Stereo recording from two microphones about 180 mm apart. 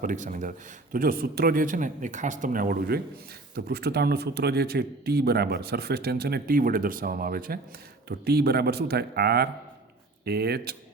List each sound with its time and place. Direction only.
0.0 s a man's voice: 45° right (ahead or behind); by 10.8 s 60° right (ahead or behind)